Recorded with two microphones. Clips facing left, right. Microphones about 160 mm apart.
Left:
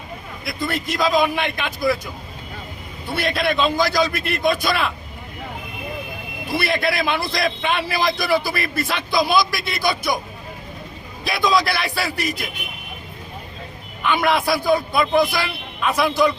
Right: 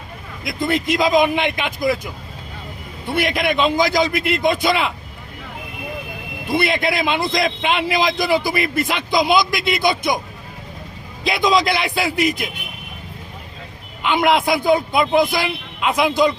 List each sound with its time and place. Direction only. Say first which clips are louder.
0.4 s a man's voice: right 5 dB; 20° right (ahead or behind)
3.1 s a man's voice: right 2 dB; 15° right (ahead or behind)
6.5 s a man's voice: right 3 dB; 20° right (ahead or behind)
11.2 s a man's voice: right 2 dB; 20° right (ahead or behind)
14.0 s a man's voice: right 2 dB; 20° right (ahead or behind)